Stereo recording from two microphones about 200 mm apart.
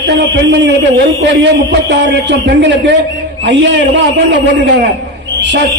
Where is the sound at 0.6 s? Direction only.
60° right (ahead or behind).